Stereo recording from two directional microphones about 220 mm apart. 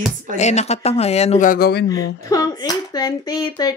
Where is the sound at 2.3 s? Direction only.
15° left (ahead or behind).